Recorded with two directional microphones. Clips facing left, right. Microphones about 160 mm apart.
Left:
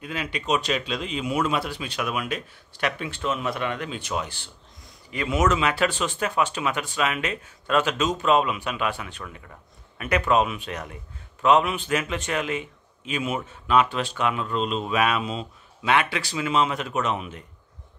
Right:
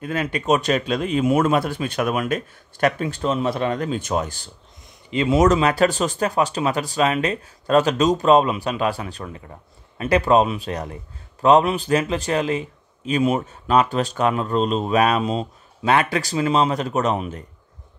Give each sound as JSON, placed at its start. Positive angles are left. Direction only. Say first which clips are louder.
{"t": 0.0, "sound": "a man's voice", "louder": "right 7 dB", "side_deg": -45}
{"t": 5.1, "sound": "a man's voice", "louder": "right 6 dB", "side_deg": -25}